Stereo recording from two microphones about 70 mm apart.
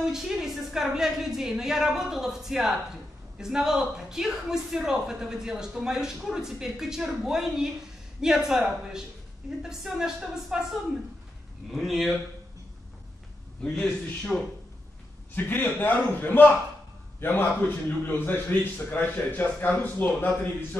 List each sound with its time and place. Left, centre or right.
0.0 s a woman's voice: centre
13.7 s a man's voice: centre
15.3 s a man's voice: left